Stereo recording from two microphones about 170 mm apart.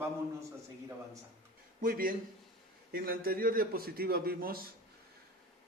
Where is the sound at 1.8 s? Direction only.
60° right (ahead or behind).